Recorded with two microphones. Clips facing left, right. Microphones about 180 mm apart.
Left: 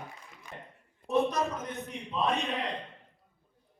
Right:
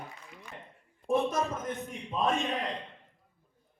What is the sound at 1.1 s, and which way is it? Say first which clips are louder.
A man's voice: even; 50° right (ahead or behind).